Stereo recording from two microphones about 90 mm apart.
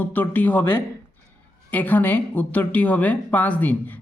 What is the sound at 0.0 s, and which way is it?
A woman's voice, 20° left (ahead or behind).